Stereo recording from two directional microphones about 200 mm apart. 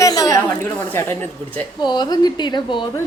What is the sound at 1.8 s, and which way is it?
Speech, 20° left (ahead or behind).